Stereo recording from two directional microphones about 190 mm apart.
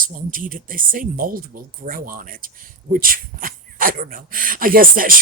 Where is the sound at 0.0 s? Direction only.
45° right (ahead or behind).